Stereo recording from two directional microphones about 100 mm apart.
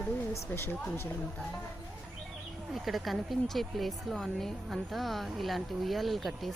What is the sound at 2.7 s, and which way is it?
Speech, centre (ahead or behind).